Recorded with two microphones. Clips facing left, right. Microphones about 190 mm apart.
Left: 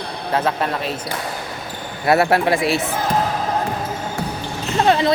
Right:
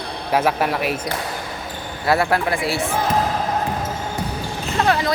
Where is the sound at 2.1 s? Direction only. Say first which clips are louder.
Left 3 dB; 25° left (ahead or behind).